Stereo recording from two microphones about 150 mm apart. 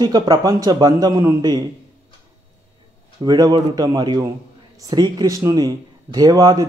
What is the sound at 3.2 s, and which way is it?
A man's voice, 30° right (ahead or behind).